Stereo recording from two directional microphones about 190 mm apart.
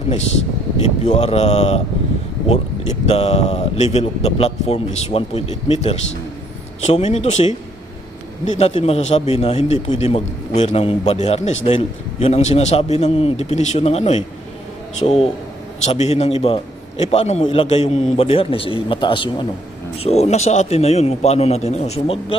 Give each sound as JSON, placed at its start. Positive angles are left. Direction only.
{"t": 1.0, "sound": "a man's voice", "side_deg": 35}
{"t": 3.1, "sound": "a man's voice", "side_deg": 30}
{"t": 8.5, "sound": "a man's voice", "side_deg": 35}